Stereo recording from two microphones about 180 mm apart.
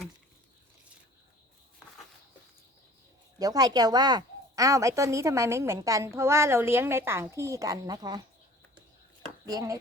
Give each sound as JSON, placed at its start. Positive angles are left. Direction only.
{"t": 3.3, "sound": "a woman's voice", "side_deg": -20}
{"t": 9.5, "sound": "speech", "side_deg": -20}